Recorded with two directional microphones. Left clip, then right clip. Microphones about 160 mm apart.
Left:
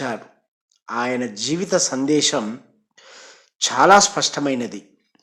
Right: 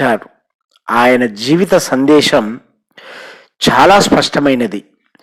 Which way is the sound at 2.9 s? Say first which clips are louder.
Right 12 dB; 40° right (ahead or behind).